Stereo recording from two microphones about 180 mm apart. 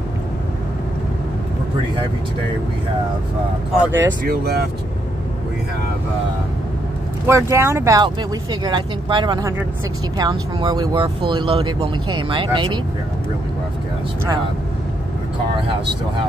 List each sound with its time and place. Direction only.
3.8 s speech: 10° right (ahead or behind)
4.2 s speech: 60° right (ahead or behind)
7.2 s speech: 15° right (ahead or behind)